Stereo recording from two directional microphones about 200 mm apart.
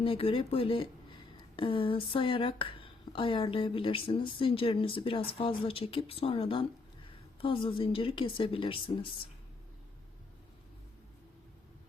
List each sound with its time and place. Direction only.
0.0 s speech: 30° left (ahead or behind)